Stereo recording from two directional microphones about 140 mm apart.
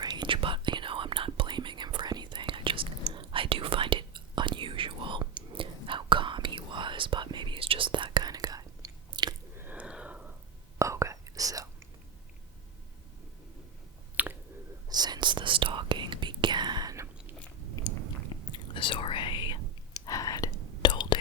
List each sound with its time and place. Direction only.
0.0 s whispering: 30° right (ahead or behind)
9.6 s a sound: 10° right (ahead or behind)
10.8 s whispering: 20° right (ahead or behind)
14.2 s a sound: 10° right (ahead or behind)
14.8 s whispering: 30° right (ahead or behind)
17.9 s chewing: 25° left (ahead or behind)
18.5 s whispering: 35° left (ahead or behind)